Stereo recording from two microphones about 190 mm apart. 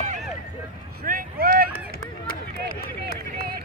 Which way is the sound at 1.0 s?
50° right (ahead or behind).